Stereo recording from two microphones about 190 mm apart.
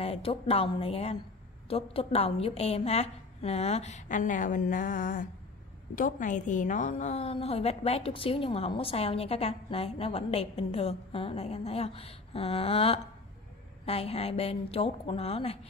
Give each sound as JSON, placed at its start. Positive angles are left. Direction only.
{"t": 0.0, "sound": "a woman's voice", "side_deg": 30}